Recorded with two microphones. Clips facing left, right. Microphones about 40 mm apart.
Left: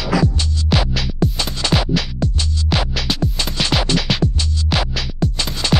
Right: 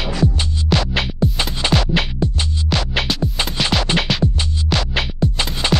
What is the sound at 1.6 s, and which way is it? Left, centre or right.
Music, right.